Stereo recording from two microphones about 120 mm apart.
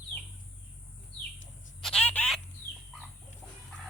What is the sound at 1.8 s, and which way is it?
Fowl, 5° left (ahead or behind).